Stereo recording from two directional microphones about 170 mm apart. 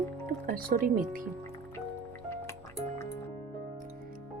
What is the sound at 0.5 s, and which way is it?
Speech, 55° right (ahead or behind).